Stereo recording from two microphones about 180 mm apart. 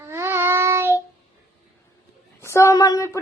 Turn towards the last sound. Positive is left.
turn(degrees=20)  # may be behind; listen again after turning